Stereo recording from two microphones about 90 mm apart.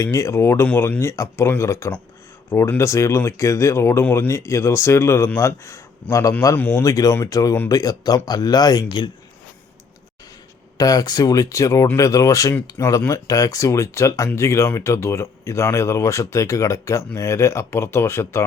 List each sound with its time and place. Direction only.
0.0 s speech: 35° left (ahead or behind)
6.8 s speech: 40° left (ahead or behind)
10.8 s speech: 45° left (ahead or behind); by 18.4 s 30° left (ahead or behind)